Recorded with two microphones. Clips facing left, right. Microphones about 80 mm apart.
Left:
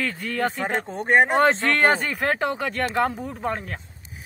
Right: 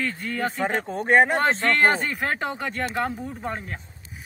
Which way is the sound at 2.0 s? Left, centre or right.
Left.